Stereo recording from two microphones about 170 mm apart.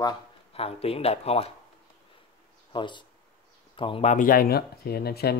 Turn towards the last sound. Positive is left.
turn(degrees=70)  # may be behind; listen again after turning